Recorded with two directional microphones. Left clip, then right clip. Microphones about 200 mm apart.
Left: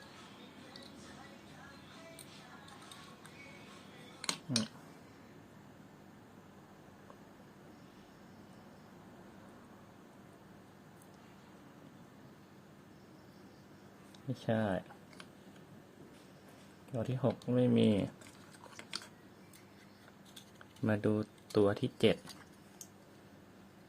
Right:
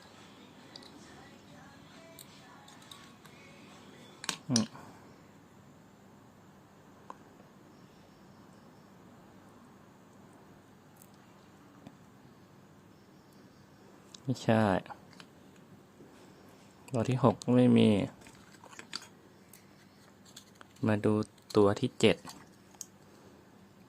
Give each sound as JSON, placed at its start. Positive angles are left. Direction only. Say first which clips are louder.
{"t": 4.5, "sound": "speech", "louder": "right 6 dB", "side_deg": -20}
{"t": 14.1, "sound": "speech", "louder": "right 7 dB", "side_deg": -25}
{"t": 16.9, "sound": "speech", "louder": "right 7 dB", "side_deg": -25}
{"t": 18.7, "sound": "a sound", "louder": "right 2 dB", "side_deg": -10}
{"t": 20.8, "sound": "speech", "louder": "right 4 dB", "side_deg": -15}